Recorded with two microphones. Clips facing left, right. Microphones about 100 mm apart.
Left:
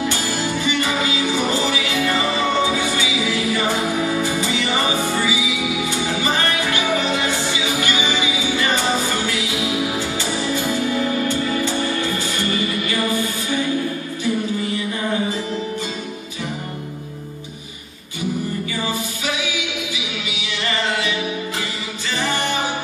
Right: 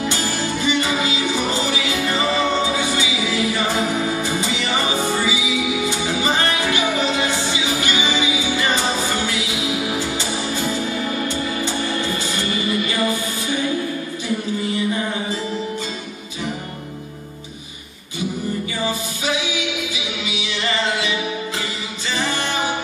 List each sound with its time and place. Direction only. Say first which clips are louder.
0.6 s music: right 2 dB; 20° right (ahead or behind)
5.9 s music: right 1 dB; 20° right (ahead or behind)